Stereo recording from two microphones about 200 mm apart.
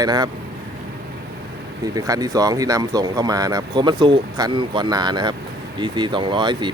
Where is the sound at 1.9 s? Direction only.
20° right (ahead or behind).